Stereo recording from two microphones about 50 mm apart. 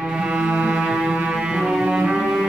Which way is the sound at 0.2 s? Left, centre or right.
Centre.